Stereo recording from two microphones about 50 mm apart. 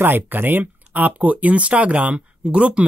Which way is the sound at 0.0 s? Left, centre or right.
Right.